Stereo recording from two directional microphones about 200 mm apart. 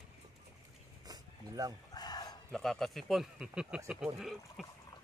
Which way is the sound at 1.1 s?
20° right (ahead or behind).